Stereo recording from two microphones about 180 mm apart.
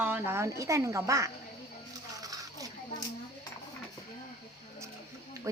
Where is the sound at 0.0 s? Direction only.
10° right (ahead or behind).